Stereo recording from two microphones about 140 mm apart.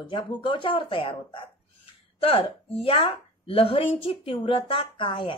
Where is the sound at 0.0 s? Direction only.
35° left (ahead or behind).